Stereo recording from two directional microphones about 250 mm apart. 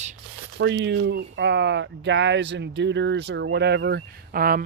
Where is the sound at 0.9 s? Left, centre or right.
Right.